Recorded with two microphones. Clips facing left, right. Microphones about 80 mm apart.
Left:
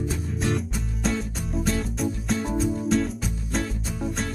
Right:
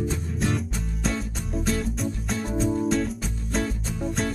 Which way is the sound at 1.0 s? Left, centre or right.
Centre.